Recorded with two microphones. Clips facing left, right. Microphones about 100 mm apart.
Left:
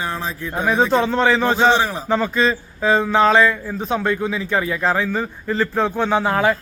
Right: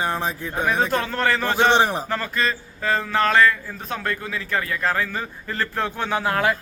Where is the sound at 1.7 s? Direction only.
20° right (ahead or behind).